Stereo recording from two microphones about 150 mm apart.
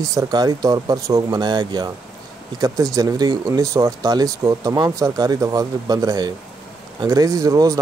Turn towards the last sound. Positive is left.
turn(degrees=-20)  # may be behind; listen again after turning